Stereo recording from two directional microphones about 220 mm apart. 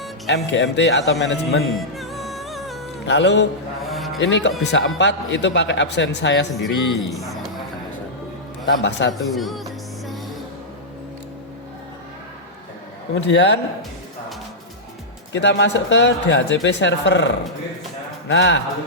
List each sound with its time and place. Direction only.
0.3 s a man's voice: 55° left (ahead or behind)
2.0 s music: centre (ahead or behind)
3.1 s a man's voice: 55° left (ahead or behind)
3.8 s sheep: centre (ahead or behind)
4.2 s a man's voice: 55° left (ahead or behind)
8.8 s a man's voice: 55° left (ahead or behind)
9.1 s speech: centre (ahead or behind)
13.1 s a man's voice: 55° left (ahead or behind)
15.3 s a man's voice: 50° left (ahead or behind)